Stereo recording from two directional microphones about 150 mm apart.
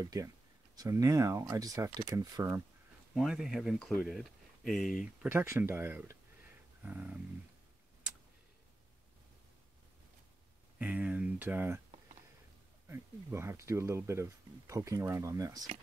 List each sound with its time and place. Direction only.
0.0 s speech: 25° right (ahead or behind)
3.2 s speech: 5° right (ahead or behind)
5.0 s speech: 10° right (ahead or behind)
6.8 s a sound: 10° right (ahead or behind)
10.8 s speech: 10° right (ahead or behind)
12.8 s speech: 15° right (ahead or behind)